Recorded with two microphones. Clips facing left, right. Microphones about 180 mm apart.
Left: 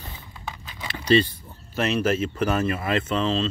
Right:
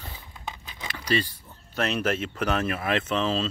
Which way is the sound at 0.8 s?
25° left (ahead or behind).